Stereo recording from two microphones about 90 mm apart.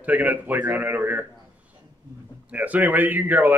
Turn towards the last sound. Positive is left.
turn(degrees=-20)  # may be behind; listen again after turning